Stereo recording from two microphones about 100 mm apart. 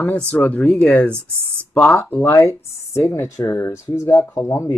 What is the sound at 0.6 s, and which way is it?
Speech, 5° left (ahead or behind).